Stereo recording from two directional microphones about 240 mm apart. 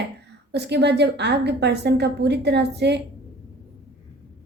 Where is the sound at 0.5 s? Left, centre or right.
Right.